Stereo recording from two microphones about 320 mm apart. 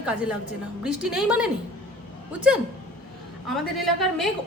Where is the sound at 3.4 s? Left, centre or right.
Centre.